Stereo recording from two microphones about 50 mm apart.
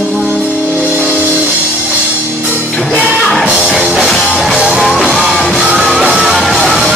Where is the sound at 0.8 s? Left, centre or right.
Right.